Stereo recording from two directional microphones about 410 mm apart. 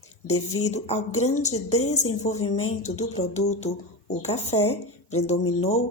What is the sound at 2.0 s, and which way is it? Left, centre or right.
Speech, left.